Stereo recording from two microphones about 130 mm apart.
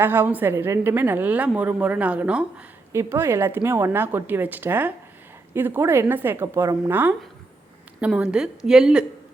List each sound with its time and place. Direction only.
0.0 s a woman's voice: 15° right (ahead or behind)
2.9 s a woman's voice: 20° right (ahead or behind)